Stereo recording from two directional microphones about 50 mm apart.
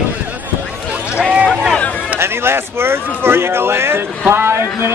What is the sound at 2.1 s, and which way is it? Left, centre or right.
Speech, right.